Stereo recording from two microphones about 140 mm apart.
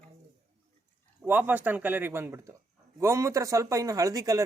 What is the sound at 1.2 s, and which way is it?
A man's voice, 10° right (ahead or behind).